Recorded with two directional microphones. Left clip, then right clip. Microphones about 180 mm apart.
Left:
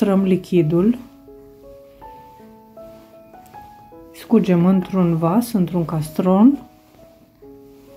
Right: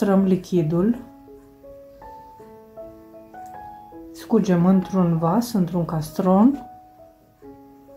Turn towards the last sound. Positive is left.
turn(degrees=15)  # may be behind; listen again after turning